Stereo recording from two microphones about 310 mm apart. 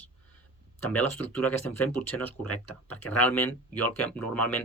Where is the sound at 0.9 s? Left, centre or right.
Centre.